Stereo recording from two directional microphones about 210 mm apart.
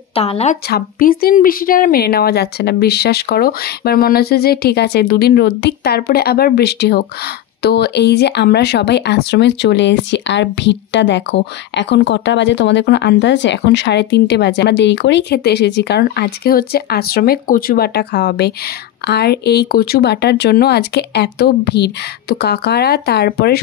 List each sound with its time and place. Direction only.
0.1 s speech: 30° left (ahead or behind)
0.7 s speech: 45° left (ahead or behind)